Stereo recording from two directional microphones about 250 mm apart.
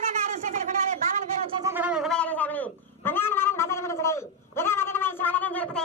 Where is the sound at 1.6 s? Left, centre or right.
Centre.